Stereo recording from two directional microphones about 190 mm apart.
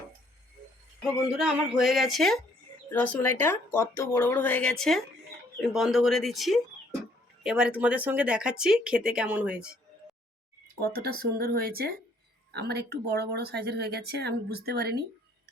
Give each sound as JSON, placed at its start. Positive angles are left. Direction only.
{"t": 1.0, "sound": "speech", "side_deg": -5}
{"t": 10.8, "sound": "speech", "side_deg": -55}